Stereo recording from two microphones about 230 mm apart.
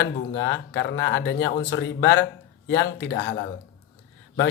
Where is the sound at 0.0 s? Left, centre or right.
Left.